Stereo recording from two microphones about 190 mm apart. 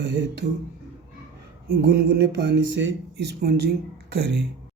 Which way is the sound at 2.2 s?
75° right (ahead or behind).